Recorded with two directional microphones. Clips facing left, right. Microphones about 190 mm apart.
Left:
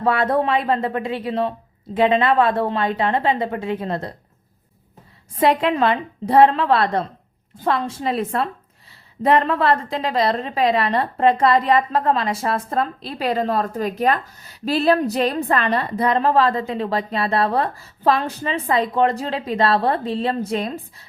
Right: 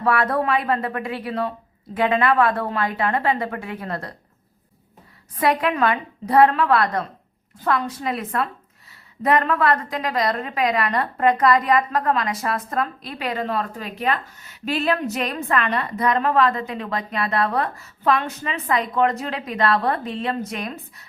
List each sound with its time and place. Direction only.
0.0 s a woman's voice: 25° left (ahead or behind)
5.4 s a woman's voice: 25° left (ahead or behind)